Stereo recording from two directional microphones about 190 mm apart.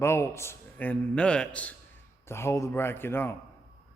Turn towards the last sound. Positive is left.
turn(degrees=10)  # may be behind; listen again after turning